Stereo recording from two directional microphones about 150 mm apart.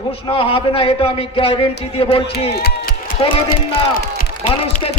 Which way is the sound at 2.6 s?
70° left (ahead or behind).